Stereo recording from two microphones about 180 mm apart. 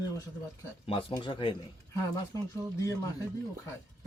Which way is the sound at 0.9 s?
30° left (ahead or behind).